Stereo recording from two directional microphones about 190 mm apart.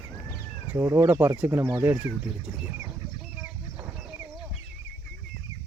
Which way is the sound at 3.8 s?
5° right (ahead or behind).